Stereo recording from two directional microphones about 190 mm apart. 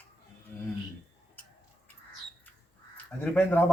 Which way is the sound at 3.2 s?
10° left (ahead or behind).